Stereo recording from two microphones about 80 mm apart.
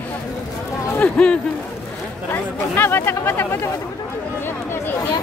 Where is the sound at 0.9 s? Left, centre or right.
Centre.